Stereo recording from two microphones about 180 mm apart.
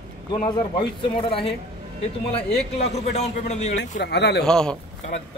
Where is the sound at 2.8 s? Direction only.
35° left (ahead or behind).